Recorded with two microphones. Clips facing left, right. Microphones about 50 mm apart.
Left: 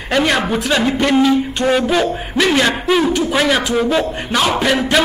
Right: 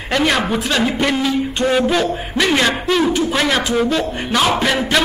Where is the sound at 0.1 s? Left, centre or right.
Centre.